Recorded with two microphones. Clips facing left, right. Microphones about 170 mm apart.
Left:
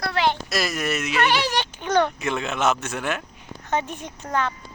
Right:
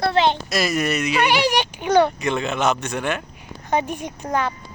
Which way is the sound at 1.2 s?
15° right (ahead or behind).